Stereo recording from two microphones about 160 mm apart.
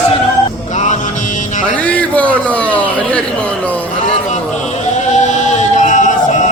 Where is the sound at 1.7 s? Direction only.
10° left (ahead or behind).